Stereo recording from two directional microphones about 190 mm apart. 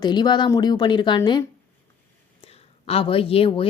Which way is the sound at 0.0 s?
25° left (ahead or behind).